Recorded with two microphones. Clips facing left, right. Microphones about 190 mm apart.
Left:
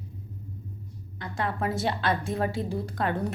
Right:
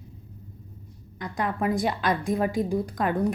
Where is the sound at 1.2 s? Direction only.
15° right (ahead or behind).